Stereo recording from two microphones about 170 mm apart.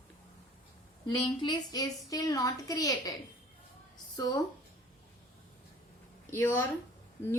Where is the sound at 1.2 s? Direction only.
30° left (ahead or behind).